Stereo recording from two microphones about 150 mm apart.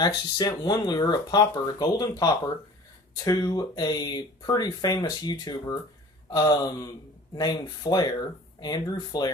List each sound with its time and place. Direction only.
0.0 s speech: 25° left (ahead or behind)